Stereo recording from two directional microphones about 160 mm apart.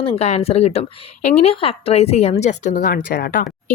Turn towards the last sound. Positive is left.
turn(degrees=60)  # may be behind; listen again after turning